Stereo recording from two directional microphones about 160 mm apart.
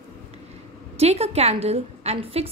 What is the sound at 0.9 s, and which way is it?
A woman's voice, 40° right (ahead or behind).